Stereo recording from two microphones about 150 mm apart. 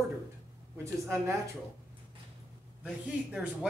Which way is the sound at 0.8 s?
20° right (ahead or behind).